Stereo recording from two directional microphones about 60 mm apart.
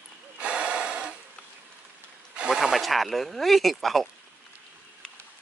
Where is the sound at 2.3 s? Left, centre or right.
Centre.